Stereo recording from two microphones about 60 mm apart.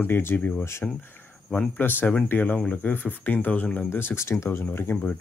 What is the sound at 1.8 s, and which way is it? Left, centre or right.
Speech, left.